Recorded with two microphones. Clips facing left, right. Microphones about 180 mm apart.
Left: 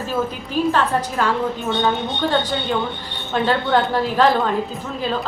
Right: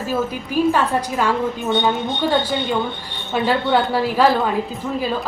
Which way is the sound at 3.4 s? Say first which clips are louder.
Right 1 dB; 10° right (ahead or behind).